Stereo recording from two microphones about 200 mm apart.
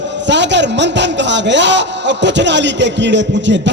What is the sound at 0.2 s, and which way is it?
A man's voice, 60° right (ahead or behind).